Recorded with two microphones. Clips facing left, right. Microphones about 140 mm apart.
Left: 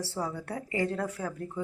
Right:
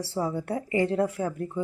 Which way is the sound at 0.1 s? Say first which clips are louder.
Right 6 dB; 25° right (ahead or behind).